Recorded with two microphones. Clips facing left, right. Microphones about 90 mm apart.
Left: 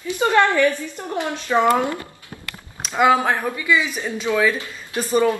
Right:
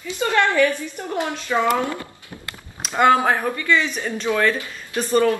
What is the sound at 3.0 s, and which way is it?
Speech, centre (ahead or behind).